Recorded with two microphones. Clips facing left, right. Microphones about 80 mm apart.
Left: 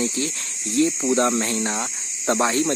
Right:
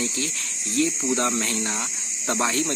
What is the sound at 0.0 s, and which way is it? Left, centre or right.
Speech, left.